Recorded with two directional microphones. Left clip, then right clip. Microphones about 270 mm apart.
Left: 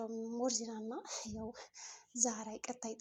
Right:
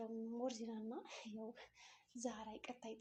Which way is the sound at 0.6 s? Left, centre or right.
Left.